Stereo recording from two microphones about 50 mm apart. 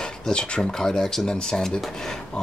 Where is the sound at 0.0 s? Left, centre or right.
Centre.